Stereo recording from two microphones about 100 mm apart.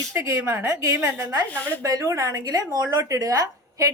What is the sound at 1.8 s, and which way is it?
A woman's voice, 35° right (ahead or behind).